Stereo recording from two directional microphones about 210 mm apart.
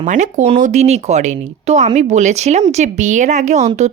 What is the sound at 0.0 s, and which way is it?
Speech, 35° right (ahead or behind).